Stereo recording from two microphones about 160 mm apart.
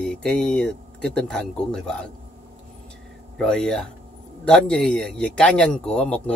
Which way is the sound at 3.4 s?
5° left (ahead or behind).